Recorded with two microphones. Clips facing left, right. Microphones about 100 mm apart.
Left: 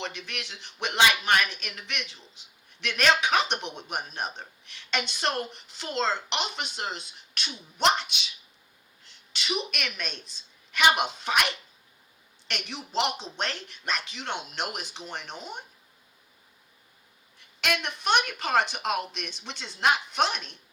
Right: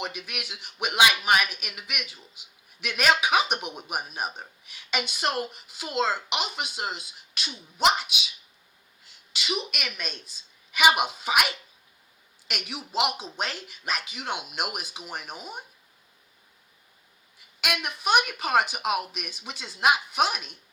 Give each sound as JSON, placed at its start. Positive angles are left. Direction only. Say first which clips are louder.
{"t": 0.0, "sound": "a woman's voice", "louder": "right 1 dB", "side_deg": -10}
{"t": 17.6, "sound": "speech", "louder": "left 1 dB", "side_deg": -10}